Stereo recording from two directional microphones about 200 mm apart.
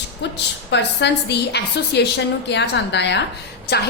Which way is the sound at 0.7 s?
60° left (ahead or behind).